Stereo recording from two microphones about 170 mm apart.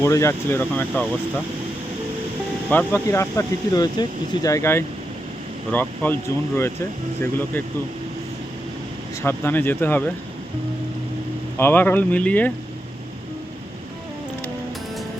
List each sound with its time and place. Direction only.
0.0 s speech: 15° left (ahead or behind)
2.6 s speech: 10° left (ahead or behind)
7.2 s speech: 10° left (ahead or behind)
9.2 s speech: 10° left (ahead or behind)
11.5 s speech: 10° left (ahead or behind)